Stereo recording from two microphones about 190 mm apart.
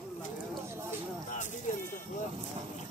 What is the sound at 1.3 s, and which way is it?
Speech, 40° left (ahead or behind).